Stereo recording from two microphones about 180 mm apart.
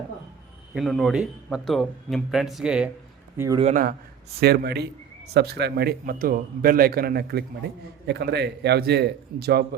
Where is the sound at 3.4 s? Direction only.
20° right (ahead or behind).